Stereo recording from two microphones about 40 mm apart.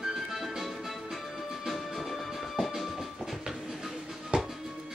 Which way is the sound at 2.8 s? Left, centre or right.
Centre.